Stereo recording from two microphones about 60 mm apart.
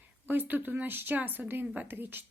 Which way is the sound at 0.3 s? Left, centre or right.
Right.